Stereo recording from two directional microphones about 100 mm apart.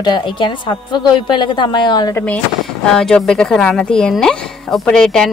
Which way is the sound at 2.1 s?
15° left (ahead or behind).